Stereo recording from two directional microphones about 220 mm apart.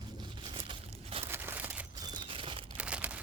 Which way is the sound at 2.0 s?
20° right (ahead or behind).